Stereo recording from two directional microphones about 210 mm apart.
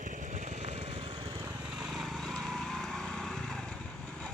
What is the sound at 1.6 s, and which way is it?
Lawn mower, centre (ahead or behind).